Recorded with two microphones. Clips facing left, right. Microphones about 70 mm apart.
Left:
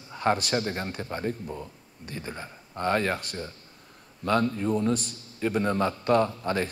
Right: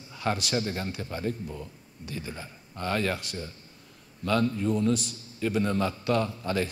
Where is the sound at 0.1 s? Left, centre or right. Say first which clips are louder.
Left 4 dB; left.